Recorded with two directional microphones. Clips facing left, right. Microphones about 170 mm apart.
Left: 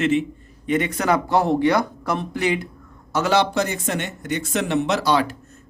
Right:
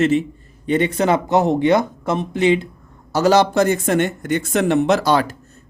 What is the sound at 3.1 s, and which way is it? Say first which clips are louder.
Speech: right 5 dB; 40° right (ahead or behind).